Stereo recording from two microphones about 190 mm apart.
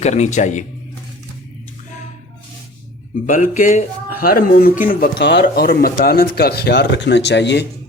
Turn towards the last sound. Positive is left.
turn(degrees=65)  # may be behind; listen again after turning